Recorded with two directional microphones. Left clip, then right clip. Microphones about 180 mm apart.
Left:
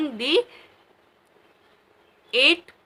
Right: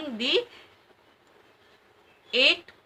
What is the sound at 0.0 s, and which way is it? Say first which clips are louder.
Speech: left 4 dB; 25° left (ahead or behind).